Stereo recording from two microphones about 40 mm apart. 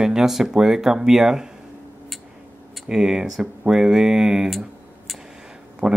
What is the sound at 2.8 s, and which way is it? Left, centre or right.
Speech, centre.